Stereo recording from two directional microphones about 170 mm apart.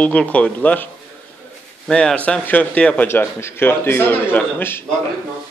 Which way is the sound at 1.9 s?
5° left (ahead or behind).